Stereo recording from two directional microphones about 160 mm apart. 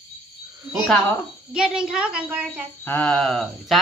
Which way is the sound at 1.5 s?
5° right (ahead or behind).